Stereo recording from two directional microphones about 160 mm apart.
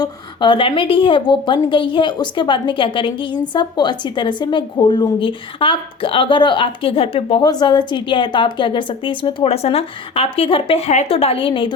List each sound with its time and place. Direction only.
0.0 s a woman's voice: 30° left (ahead or behind)